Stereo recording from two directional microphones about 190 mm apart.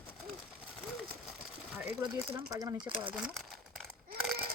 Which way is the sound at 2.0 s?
15° right (ahead or behind).